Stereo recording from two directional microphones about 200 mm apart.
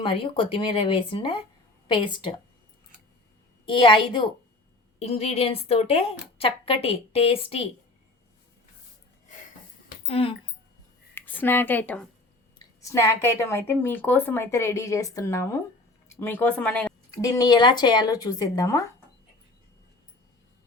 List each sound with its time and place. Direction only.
0.0 s a woman's voice: 25° left (ahead or behind)
3.7 s a woman's voice: 25° left (ahead or behind)
10.1 s a woman's voice: 30° left (ahead or behind)
11.1 s speech: 10° left (ahead or behind)